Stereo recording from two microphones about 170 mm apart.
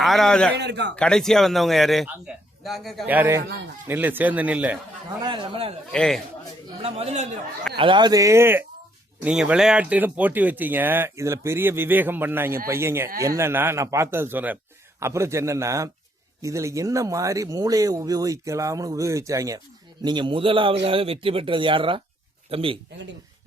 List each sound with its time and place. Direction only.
0.0 s a man's voice: centre (ahead or behind)
0.5 s a man's voice: 90° right
0.9 s a man's voice: 5° left (ahead or behind)
3.1 s speech: 15° right (ahead or behind)
5.2 s speech: 30° right (ahead or behind)
5.9 s a man's voice: 5° left (ahead or behind)
6.8 s speech: 35° right (ahead or behind)
7.8 s speech: 30° right (ahead or behind)